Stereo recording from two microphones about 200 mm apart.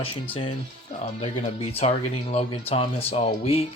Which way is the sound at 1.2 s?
30° left (ahead or behind).